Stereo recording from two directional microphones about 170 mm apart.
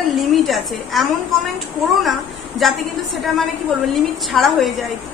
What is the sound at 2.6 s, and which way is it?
Speech, centre (ahead or behind).